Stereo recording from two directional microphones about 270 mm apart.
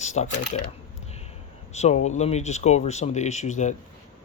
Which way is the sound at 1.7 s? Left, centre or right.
Left.